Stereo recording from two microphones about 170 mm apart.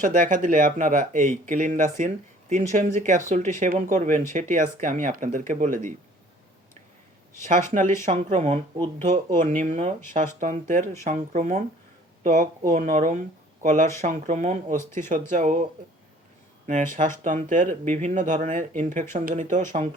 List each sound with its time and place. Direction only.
0.0 s speech: 50° right (ahead or behind)
7.7 s speech: 45° right (ahead or behind)
16.6 s speech: 50° right (ahead or behind)